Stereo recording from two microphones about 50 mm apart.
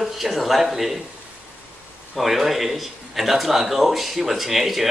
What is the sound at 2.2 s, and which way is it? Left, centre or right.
A man's voice, centre.